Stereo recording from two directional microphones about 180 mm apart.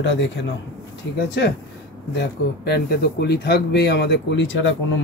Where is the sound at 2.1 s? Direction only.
65° left (ahead or behind).